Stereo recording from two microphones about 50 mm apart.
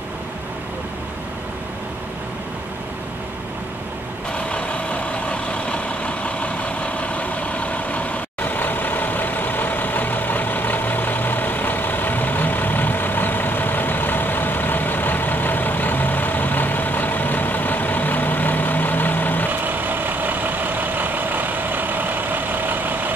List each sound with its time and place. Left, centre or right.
4.5 s vehicle: left
19.6 s vehicle: right